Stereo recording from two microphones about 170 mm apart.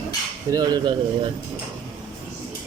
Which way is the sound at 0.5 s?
25° right (ahead or behind).